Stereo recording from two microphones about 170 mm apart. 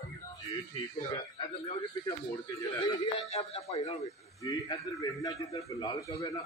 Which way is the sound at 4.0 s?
20° left (ahead or behind).